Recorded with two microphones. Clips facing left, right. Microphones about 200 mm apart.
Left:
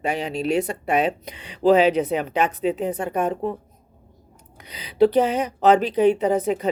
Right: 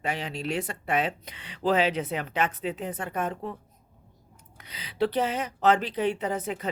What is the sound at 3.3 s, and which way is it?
Speech, 35° left (ahead or behind).